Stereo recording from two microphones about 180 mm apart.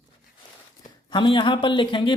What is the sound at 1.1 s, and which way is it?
Speech, 25° left (ahead or behind).